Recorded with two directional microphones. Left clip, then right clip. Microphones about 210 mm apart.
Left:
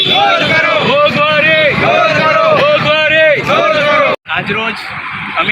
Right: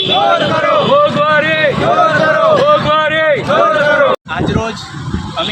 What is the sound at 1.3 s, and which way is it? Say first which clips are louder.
Vehicle: left 2 dB; 15° right (ahead or behind).